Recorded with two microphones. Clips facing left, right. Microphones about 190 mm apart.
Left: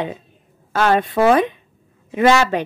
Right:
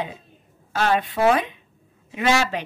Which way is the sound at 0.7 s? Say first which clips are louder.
Left 5 dB; 50° left (ahead or behind).